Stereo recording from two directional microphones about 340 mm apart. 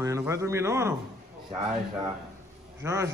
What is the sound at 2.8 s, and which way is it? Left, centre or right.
Speech, centre.